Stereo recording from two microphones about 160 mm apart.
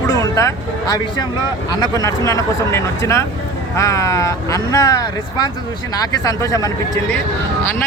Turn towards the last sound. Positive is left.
turn(degrees=20)  # may be behind; listen again after turning